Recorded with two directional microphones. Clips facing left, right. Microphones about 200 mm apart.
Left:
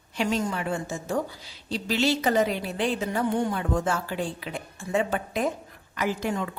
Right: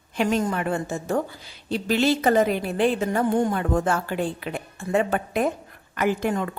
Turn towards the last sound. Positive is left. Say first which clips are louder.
# right 4 dB
turn(degrees=-55)  # may be behind; listen again after turning